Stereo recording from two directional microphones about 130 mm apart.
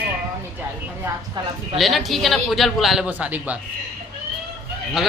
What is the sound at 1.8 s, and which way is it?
A woman's voice, centre (ahead or behind).